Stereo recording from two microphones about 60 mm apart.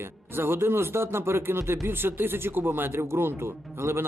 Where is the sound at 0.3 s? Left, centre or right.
Right.